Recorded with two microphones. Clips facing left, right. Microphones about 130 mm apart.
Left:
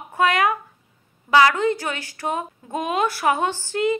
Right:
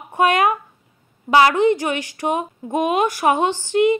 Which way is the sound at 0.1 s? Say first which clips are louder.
Right 3 dB; 20° right (ahead or behind).